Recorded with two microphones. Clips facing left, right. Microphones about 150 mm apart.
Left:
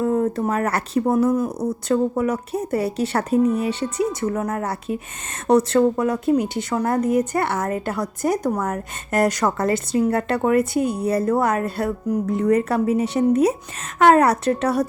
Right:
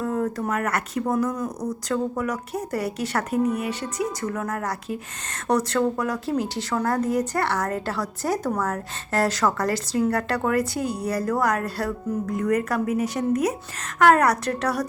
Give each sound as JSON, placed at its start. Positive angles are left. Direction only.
{"t": 0.0, "sound": "a woman's voice", "side_deg": 25}